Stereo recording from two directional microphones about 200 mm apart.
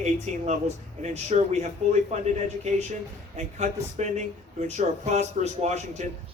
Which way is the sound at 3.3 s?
35° right (ahead or behind).